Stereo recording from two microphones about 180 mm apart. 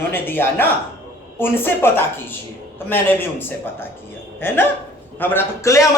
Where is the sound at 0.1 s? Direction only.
10° left (ahead or behind).